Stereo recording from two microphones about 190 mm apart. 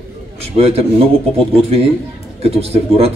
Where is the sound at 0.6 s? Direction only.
30° right (ahead or behind).